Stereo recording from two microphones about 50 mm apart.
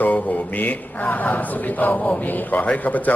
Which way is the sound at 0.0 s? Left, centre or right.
Left.